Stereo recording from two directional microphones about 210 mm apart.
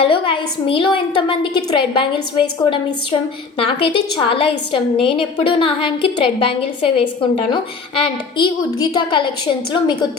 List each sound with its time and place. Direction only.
0.0 s a woman's voice: 25° left (ahead or behind)
3.6 s a woman's voice: 25° left (ahead or behind)